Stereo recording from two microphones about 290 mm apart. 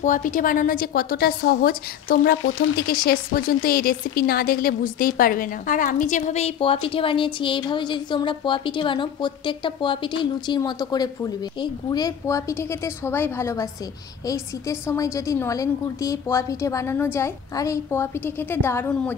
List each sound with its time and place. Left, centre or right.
0.0 s a woman's voice: left; by 19.1 s centre